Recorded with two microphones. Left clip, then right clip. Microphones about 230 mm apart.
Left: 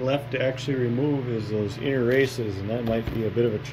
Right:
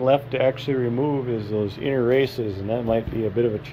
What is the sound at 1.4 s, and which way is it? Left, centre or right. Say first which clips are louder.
Speech: right 3 dB; right.